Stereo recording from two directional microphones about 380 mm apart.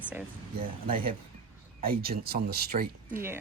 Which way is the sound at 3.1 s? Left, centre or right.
Centre.